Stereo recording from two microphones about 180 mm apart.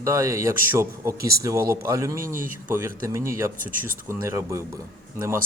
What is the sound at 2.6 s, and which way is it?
Speech, 10° right (ahead or behind).